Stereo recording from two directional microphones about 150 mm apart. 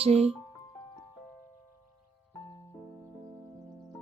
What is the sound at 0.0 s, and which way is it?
Speech, 45° right (ahead or behind).